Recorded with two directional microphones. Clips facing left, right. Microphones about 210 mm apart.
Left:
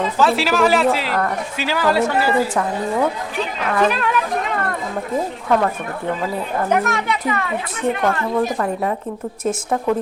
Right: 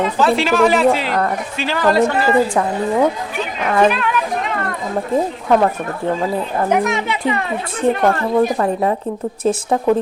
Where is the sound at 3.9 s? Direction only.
40° left (ahead or behind).